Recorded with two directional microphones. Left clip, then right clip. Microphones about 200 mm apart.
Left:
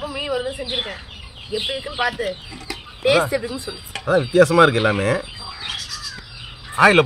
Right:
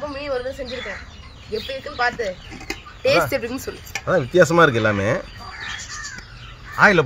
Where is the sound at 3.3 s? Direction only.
30° right (ahead or behind).